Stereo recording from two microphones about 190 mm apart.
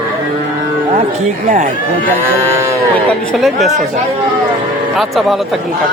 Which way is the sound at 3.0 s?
Centre (ahead or behind).